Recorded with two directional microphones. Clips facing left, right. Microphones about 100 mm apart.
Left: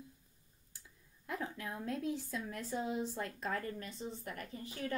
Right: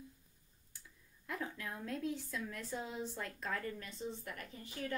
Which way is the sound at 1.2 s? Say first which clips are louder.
Left 2 dB; 25° left (ahead or behind).